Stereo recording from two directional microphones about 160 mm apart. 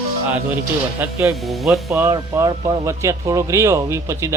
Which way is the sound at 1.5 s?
Centre (ahead or behind).